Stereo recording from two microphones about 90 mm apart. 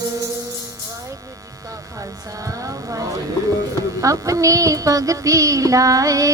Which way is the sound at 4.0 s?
35° right (ahead or behind).